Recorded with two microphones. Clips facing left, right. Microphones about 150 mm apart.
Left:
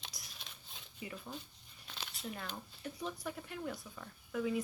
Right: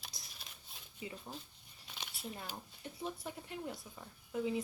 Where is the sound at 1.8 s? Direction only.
5° right (ahead or behind).